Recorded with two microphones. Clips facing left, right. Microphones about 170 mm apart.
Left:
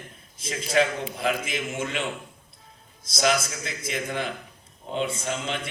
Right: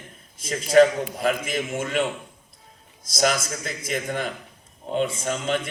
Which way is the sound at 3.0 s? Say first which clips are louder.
Right 1 dB; 45° right (ahead or behind).